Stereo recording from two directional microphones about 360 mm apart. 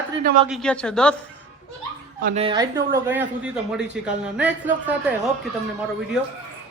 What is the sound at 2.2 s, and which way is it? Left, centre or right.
Speech, centre.